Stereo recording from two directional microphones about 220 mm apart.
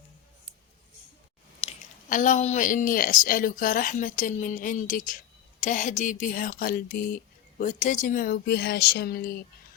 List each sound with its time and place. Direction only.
1.6 s speech: 35° left (ahead or behind)